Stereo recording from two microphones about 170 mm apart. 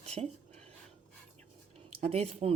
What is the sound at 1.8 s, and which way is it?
Speech, 40° right (ahead or behind).